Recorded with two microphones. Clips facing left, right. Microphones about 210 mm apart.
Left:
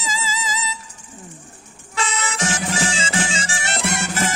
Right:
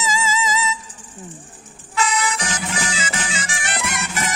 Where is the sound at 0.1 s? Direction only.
35° left (ahead or behind).